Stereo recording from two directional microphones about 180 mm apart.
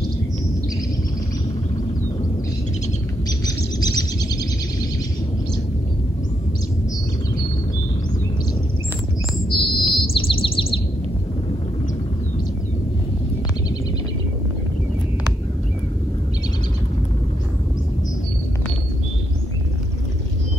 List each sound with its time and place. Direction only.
3.4 s bird: 20° left (ahead or behind)
9.5 s bird: 30° left (ahead or behind)